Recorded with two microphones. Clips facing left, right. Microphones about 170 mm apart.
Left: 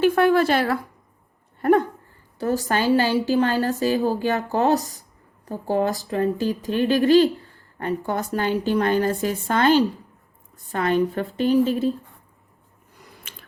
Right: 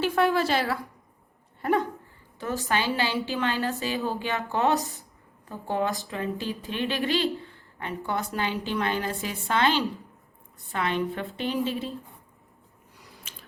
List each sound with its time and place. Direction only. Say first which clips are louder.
0.0 s speech: left 6 dB; 55° left (ahead or behind)
2.4 s a woman's voice: left 6 dB; 40° left (ahead or behind)
13.3 s a sound: left 3 dB; 60° left (ahead or behind)